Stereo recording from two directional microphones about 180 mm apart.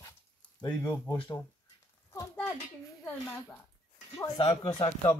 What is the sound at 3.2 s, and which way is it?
Speech, 15° left (ahead or behind).